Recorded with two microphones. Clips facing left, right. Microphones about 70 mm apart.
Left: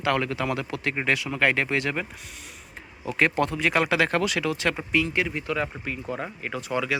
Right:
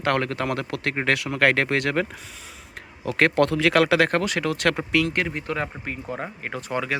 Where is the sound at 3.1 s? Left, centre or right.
Right.